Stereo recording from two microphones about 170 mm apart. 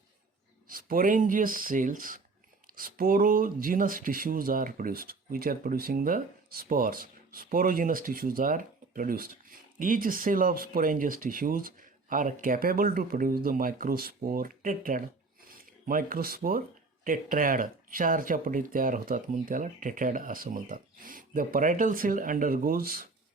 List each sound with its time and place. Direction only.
0.7 s speech: 55° right (ahead or behind)